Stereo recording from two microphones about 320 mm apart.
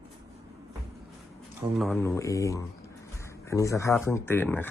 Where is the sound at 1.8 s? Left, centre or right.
Centre.